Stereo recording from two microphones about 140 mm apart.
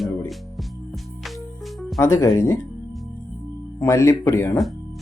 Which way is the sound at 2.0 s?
20° left (ahead or behind).